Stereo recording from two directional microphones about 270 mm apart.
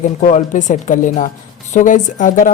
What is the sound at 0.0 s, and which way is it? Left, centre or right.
A woman's voice, left.